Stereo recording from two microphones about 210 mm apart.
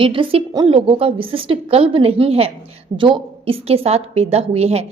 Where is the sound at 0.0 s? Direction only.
25° right (ahead or behind).